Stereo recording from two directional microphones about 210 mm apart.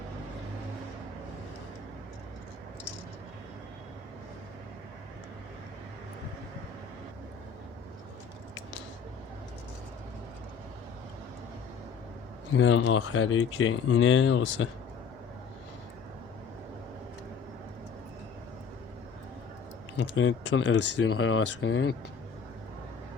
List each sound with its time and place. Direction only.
12.5 s speech: 65° left (ahead or behind)
20.0 s speech: 65° left (ahead or behind)